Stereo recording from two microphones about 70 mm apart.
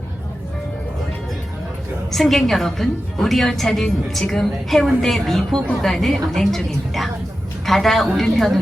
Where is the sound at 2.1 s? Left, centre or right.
Centre.